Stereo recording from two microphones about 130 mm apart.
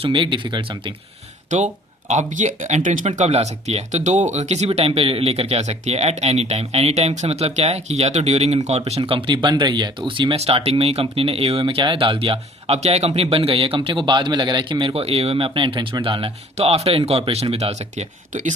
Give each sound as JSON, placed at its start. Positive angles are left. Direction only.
{"t": 0.0, "sound": "speech", "side_deg": -40}
{"t": 1.5, "sound": "speech", "side_deg": -70}
{"t": 16.6, "sound": "speech", "side_deg": -50}